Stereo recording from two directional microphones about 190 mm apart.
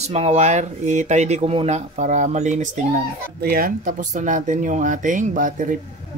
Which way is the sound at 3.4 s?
50° right (ahead or behind).